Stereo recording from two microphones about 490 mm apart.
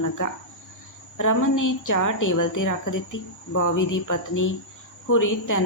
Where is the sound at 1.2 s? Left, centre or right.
Left.